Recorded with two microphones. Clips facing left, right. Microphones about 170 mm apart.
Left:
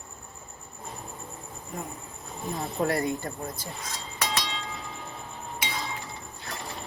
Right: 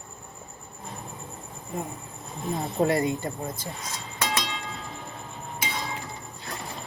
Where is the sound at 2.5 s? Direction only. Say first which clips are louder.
Right 3 dB; 20° right (ahead or behind).